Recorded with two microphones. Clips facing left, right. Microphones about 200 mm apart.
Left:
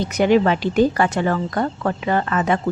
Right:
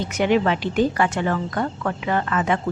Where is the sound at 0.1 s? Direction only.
40° left (ahead or behind).